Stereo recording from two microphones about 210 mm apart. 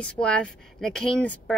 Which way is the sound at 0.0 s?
5° left (ahead or behind).